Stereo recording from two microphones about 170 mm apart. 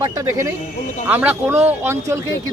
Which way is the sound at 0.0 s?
20° right (ahead or behind).